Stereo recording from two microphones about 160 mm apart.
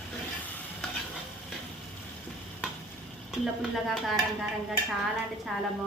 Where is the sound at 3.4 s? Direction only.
Centre (ahead or behind).